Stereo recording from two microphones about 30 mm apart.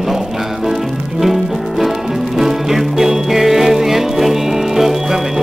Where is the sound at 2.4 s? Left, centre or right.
Centre.